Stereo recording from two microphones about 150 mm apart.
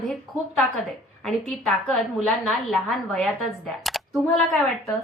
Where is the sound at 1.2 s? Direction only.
Centre (ahead or behind).